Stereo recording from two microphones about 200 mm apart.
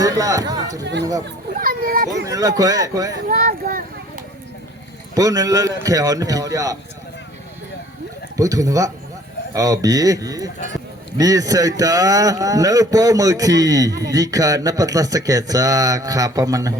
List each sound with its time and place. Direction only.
0.0 s speech: 15° right (ahead or behind)
1.5 s a child's voice: 45° right (ahead or behind)
2.2 s a man's voice: 15° right (ahead or behind)
3.2 s speech: 45° right (ahead or behind)
5.1 s a man's voice: 20° right (ahead or behind)
8.4 s a man's voice: 15° right (ahead or behind)